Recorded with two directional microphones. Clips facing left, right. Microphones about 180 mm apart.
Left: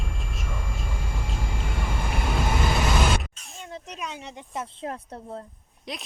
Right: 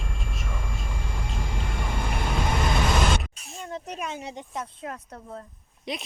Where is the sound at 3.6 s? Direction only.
50° right (ahead or behind).